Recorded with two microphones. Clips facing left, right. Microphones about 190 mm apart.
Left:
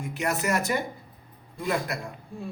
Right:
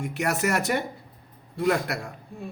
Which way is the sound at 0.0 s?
65° right (ahead or behind).